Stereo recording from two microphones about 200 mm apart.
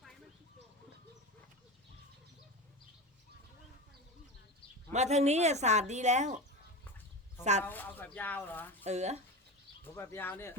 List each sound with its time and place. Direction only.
4.9 s speech: 35° right (ahead or behind)
7.6 s speech: 10° left (ahead or behind)
8.8 s speech: 35° right (ahead or behind)
9.8 s speech: 10° left (ahead or behind)